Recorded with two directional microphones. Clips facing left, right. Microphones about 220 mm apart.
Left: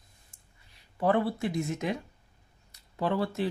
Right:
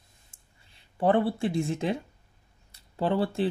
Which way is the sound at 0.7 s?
30° right (ahead or behind).